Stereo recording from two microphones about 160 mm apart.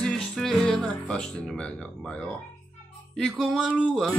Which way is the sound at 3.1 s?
Centre (ahead or behind).